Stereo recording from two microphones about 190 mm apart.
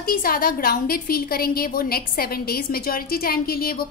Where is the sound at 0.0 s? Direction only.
50° left (ahead or behind).